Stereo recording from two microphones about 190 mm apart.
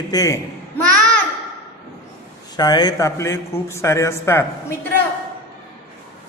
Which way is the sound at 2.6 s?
20° left (ahead or behind).